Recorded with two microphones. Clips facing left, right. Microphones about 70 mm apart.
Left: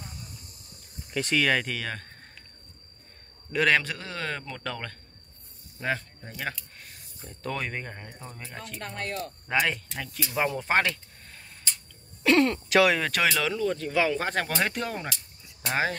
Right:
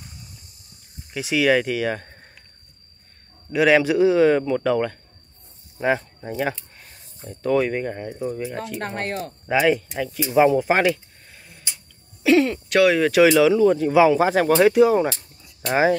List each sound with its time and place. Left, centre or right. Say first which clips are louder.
1.1 s a man's voice: right 6 dB; centre
3.5 s a man's voice: right 8 dB; centre
6.8 s a man's voice: right 4 dB; centre
8.7 s speech: right 3 dB; right
9.5 s speech: right 8 dB; centre
10.2 s a sound: right 12 dB; centre
13.3 s a man's voice: right 12 dB; centre